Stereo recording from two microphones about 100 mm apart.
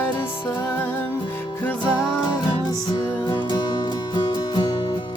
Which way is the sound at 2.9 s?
45° left (ahead or behind).